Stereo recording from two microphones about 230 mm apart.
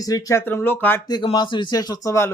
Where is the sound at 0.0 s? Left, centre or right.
Centre.